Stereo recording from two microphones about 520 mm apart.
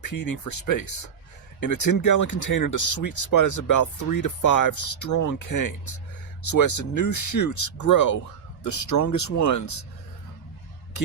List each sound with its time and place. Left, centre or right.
0.0 s speech: left